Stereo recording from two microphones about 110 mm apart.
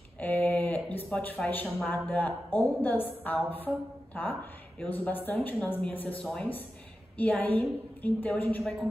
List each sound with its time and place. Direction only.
0.2 s a sound: 15° left (ahead or behind)
1.9 s speech: 15° left (ahead or behind)
7.2 s speech: 15° left (ahead or behind)